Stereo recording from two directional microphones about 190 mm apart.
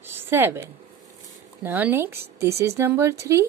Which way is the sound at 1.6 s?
10° right (ahead or behind).